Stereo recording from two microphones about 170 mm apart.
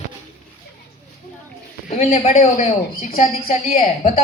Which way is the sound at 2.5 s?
50° left (ahead or behind).